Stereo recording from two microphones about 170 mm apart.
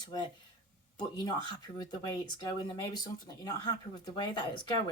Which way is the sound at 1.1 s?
25° left (ahead or behind).